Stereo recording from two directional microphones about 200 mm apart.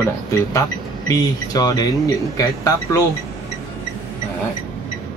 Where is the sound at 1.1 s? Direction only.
20° left (ahead or behind).